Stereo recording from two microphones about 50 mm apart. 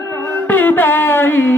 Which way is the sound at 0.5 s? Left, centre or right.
Left.